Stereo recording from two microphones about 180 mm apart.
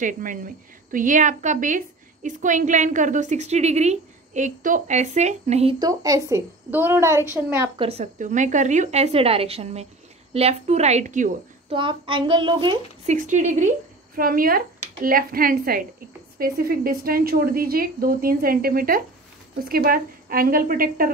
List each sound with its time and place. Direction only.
0.0 s a woman's voice: 50° right (ahead or behind)
5.8 s a woman's voice: 20° right (ahead or behind)
7.7 s speech: 30° right (ahead or behind)
11.7 s a child's voice: 30° right (ahead or behind)
13.0 s a woman's voice: 45° right (ahead or behind)